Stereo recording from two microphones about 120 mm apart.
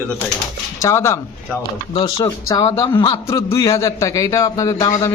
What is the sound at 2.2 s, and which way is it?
A man's voice, 25° left (ahead or behind).